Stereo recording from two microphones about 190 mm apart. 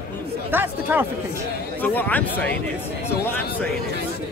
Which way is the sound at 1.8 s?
10° left (ahead or behind).